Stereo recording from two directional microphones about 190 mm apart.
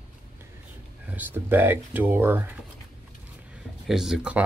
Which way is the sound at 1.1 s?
10° right (ahead or behind).